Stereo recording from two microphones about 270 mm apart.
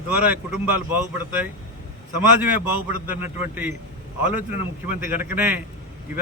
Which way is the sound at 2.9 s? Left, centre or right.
Centre.